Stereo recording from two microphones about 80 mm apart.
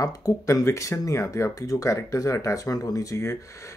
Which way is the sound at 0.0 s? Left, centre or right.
Left.